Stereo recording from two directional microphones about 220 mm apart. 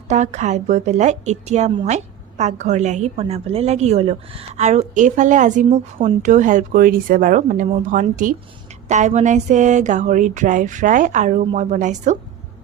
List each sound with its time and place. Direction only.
0.1 s a woman's voice: 30° right (ahead or behind)